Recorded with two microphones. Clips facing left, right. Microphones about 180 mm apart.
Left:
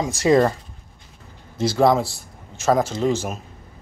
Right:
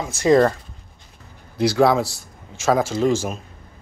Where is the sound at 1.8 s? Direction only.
Centre (ahead or behind).